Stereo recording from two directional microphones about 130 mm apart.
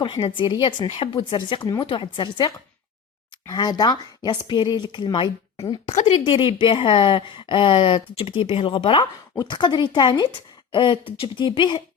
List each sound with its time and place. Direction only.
0.0 s speech: 35° left (ahead or behind)
5.9 s speech: 75° left (ahead or behind)
6.1 s speech: 40° left (ahead or behind)